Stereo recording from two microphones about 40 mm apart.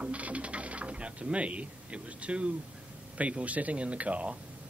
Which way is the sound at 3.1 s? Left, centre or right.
Right.